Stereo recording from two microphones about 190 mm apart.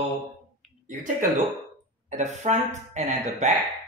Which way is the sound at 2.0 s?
35° right (ahead or behind).